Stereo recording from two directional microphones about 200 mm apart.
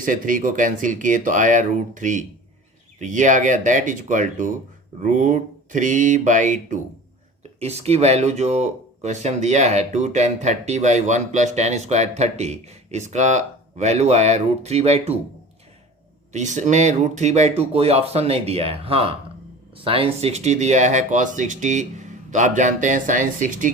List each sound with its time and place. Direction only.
0.0 s speech: 40° right (ahead or behind)
16.3 s speech: 35° right (ahead or behind)